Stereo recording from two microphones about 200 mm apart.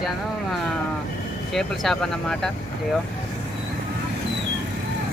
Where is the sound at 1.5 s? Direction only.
Centre (ahead or behind).